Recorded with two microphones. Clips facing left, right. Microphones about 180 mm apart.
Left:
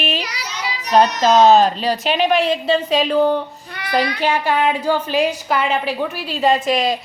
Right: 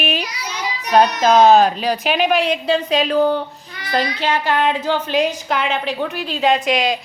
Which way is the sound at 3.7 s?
60° left (ahead or behind).